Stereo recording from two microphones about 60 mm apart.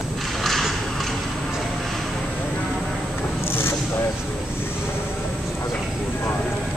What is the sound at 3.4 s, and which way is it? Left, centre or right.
Zipper, left.